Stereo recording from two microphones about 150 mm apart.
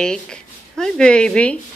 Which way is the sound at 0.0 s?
5° left (ahead or behind).